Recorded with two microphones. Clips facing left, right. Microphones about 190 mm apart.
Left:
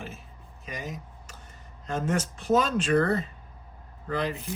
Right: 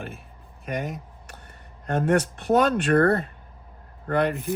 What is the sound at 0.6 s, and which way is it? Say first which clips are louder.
Speech: right 7 dB; 60° right (ahead or behind).